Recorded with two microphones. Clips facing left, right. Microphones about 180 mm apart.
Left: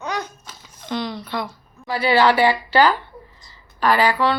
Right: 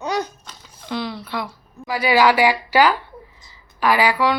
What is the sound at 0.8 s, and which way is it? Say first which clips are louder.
A woman's voice: left 1 dB; 5° right (ahead or behind).